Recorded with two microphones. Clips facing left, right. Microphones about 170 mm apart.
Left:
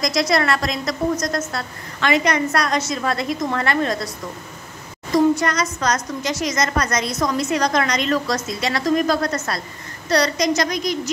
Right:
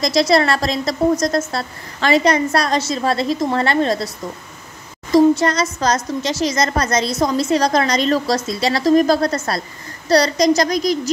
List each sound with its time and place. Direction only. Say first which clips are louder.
0.0 s a woman's voice: right 4 dB; 30° right (ahead or behind)
5.1 s a woman's voice: right 4 dB; 30° right (ahead or behind)